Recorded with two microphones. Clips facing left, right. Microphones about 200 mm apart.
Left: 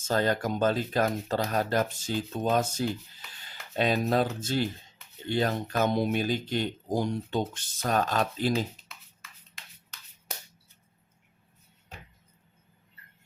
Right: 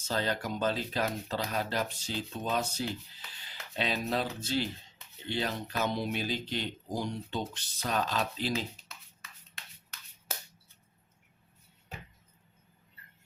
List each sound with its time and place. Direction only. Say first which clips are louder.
0.0 s speech: left 6 dB; 50° left (ahead or behind)